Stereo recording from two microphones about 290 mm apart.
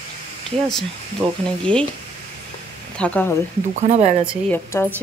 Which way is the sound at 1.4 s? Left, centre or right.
Centre.